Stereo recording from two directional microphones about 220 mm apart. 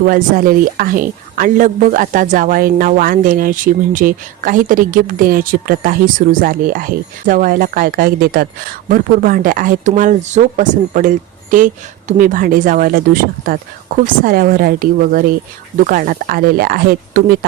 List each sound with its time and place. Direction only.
0.0 s speech: 40° right (ahead or behind)